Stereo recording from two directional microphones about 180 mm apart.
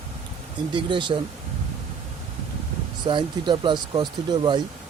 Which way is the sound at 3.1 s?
25° right (ahead or behind).